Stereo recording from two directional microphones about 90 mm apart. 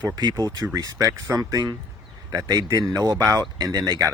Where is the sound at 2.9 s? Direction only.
40° right (ahead or behind).